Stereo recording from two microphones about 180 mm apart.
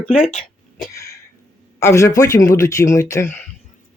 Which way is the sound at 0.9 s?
15° left (ahead or behind).